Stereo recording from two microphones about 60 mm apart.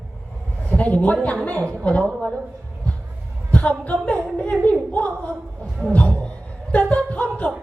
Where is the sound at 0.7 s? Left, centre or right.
Left.